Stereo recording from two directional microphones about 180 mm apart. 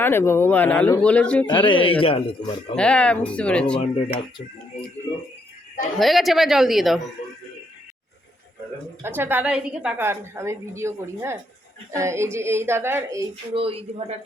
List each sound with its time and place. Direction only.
0.0 s speech: 10° left (ahead or behind)
1.6 s speech: 30° left (ahead or behind)
2.7 s speech: 5° left (ahead or behind)
3.8 s speech: 30° left (ahead or behind)
6.0 s speech: centre (ahead or behind)
9.0 s a woman's voice: 15° right (ahead or behind)
13.5 s speech: 30° right (ahead or behind)